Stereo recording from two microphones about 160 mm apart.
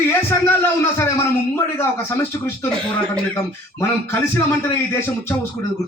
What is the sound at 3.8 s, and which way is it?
A man's voice, 15° left (ahead or behind).